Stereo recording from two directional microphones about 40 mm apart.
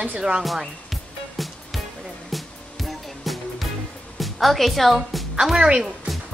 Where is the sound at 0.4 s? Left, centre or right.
Centre.